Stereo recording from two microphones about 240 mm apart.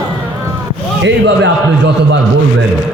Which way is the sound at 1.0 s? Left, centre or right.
Right.